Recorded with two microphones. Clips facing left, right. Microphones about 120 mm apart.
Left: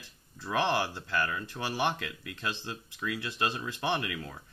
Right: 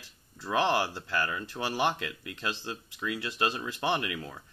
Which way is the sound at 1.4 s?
20° left (ahead or behind).